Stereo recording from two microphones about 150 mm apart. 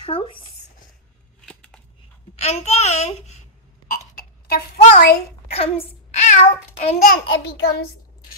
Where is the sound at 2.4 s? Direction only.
45° left (ahead or behind).